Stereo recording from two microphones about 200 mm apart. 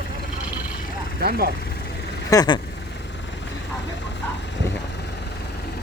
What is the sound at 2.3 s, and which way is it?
Speech, 20° left (ahead or behind).